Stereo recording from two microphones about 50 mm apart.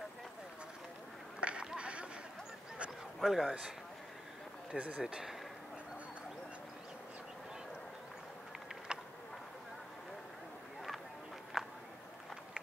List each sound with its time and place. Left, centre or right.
1.4 s a sound: right
1.8 s run: right
3.2 s a man's voice: centre
3.4 s speech: centre
4.7 s speech: right
5.0 s speech: centre
8.9 s insect: centre
11.6 s a sound: centre